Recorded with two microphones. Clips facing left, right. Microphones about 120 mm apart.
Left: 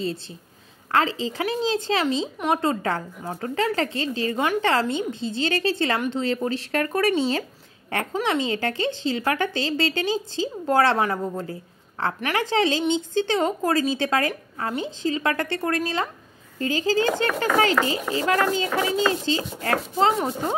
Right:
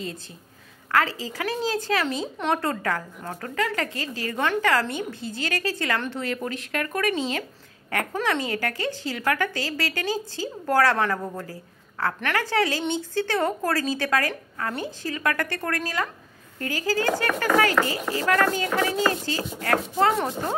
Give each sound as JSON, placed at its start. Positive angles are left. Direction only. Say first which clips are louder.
{"t": 0.9, "sound": "speech", "louder": "left 2 dB", "side_deg": 25}